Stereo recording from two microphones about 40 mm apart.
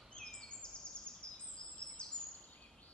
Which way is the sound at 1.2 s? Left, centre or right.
Left.